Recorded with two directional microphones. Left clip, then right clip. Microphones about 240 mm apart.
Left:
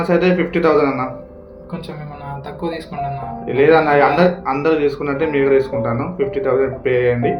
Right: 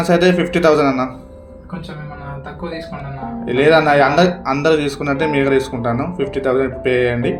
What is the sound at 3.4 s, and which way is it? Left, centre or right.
Speech, right.